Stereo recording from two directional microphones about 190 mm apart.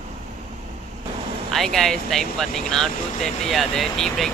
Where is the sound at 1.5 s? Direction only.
Centre (ahead or behind).